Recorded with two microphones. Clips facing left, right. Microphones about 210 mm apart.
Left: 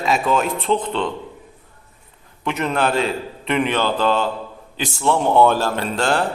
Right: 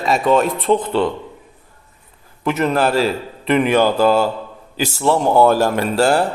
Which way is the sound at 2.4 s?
5° right (ahead or behind).